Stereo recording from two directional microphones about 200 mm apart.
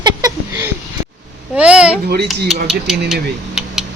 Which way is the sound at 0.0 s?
20° right (ahead or behind).